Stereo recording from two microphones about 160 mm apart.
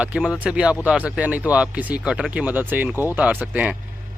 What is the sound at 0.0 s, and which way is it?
Speech, 10° right (ahead or behind).